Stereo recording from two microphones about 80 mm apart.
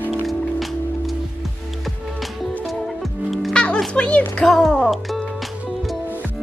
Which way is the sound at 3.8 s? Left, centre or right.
Centre.